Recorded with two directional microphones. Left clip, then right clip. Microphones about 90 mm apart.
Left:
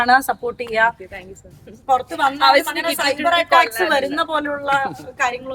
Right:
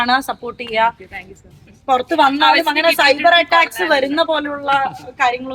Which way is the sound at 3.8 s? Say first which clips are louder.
Right 3 dB; 35° right (ahead or behind).